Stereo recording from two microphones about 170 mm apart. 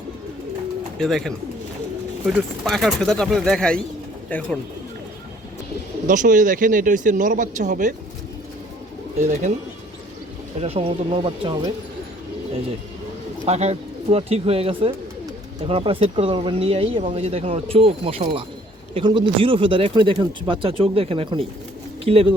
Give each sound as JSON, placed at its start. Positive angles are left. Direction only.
{"t": 0.9, "sound": "speech", "side_deg": 0}
{"t": 6.1, "sound": "speech", "side_deg": -50}
{"t": 9.1, "sound": "speech", "side_deg": -45}
{"t": 10.6, "sound": "speech", "side_deg": -35}
{"t": 13.4, "sound": "speech", "side_deg": -40}